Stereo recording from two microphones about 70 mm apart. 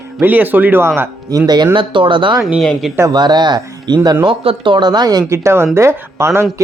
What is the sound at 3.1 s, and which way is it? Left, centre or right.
Speech, right.